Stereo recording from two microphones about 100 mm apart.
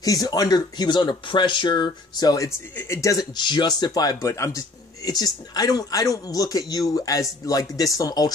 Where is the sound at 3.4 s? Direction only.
50° left (ahead or behind).